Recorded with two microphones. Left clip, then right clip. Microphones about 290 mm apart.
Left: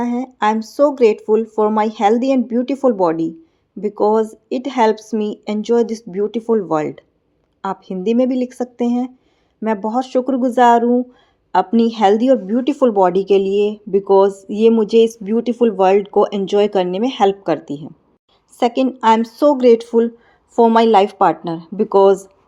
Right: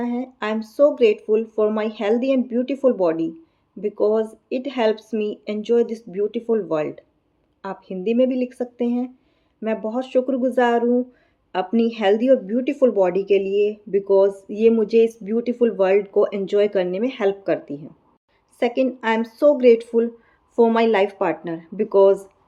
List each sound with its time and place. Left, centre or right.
0.0 s speech: left